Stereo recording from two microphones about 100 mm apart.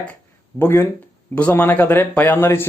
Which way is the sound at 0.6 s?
25° left (ahead or behind).